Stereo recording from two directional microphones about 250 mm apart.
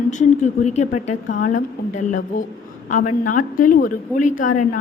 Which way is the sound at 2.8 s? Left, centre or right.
Left.